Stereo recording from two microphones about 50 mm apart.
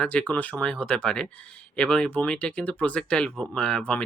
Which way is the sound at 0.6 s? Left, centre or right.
Centre.